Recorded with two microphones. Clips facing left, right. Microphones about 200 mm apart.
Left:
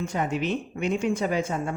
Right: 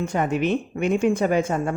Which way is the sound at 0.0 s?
55° right (ahead or behind).